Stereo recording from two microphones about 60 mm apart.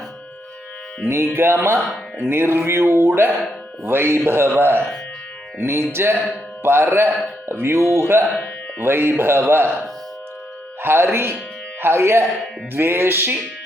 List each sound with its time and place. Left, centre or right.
1.0 s speech: right
10.8 s speech: right